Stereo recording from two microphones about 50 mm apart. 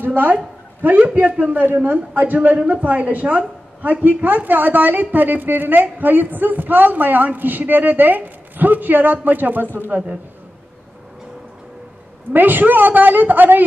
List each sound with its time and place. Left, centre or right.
0.0 s a man's voice: right
12.3 s a man's voice: right